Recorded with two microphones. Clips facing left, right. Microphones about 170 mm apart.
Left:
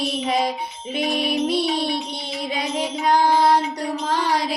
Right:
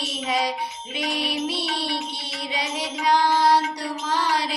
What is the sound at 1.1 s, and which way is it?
Music, 50° left (ahead or behind).